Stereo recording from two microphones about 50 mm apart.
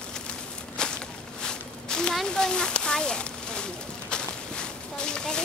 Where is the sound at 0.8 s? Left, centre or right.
Centre.